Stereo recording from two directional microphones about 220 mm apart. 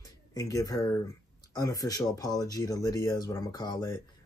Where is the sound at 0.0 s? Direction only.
15° left (ahead or behind).